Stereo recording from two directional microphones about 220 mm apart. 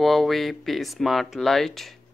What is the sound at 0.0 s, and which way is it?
Speech, centre (ahead or behind).